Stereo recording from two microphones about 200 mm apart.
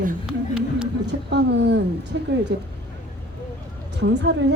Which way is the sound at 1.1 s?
60° right (ahead or behind).